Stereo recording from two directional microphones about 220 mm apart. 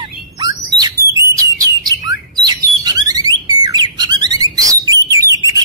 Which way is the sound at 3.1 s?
20° right (ahead or behind).